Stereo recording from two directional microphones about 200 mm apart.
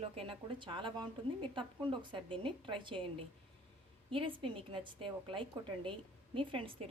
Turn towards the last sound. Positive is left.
turn(degrees=-25)  # may be behind; listen again after turning